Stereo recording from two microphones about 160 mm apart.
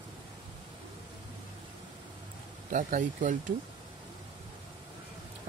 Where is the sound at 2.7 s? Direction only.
55° right (ahead or behind).